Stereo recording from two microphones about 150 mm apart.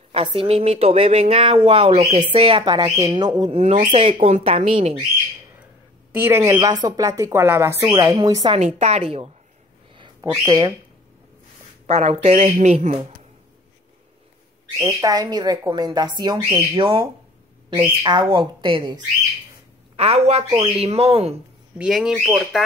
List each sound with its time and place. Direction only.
0.1 s speech: 40° right (ahead or behind)
2.0 s speech: 55° right (ahead or behind)
2.4 s speech: 30° right (ahead or behind)
3.5 s speech: 40° right (ahead or behind)
6.1 s speech: 15° right (ahead or behind)
6.4 s speech: 25° right (ahead or behind)
8.7 s speech: 45° right (ahead or behind)
9.9 s a sound: 30° right (ahead or behind)
10.4 s speech: 30° right (ahead or behind)
11.8 s speech: 45° right (ahead or behind)
14.8 s speech: 20° right (ahead or behind)
20.0 s speech: 45° right (ahead or behind)
21.7 s speech: 5° right (ahead or behind)